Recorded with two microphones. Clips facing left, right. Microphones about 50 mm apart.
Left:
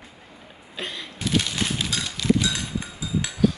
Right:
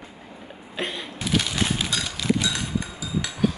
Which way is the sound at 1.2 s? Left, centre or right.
Centre.